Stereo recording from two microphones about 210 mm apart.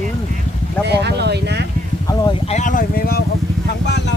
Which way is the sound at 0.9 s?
50° right (ahead or behind).